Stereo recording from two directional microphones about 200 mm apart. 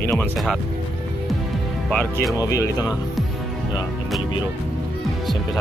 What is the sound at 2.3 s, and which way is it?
Speech, 15° left (ahead or behind).